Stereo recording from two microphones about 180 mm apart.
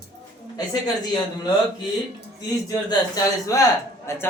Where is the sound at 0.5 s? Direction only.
20° left (ahead or behind).